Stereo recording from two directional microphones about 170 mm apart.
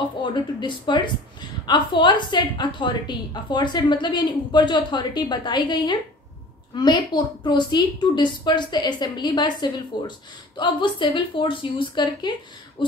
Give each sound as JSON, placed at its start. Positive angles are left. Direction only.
{"t": 0.2, "sound": "a woman's voice", "side_deg": 25}